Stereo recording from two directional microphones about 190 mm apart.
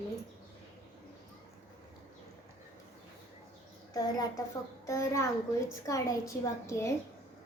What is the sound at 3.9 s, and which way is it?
A child's voice, 20° left (ahead or behind).